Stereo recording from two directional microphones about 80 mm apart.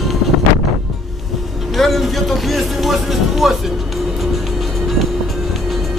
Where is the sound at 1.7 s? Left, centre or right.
Centre.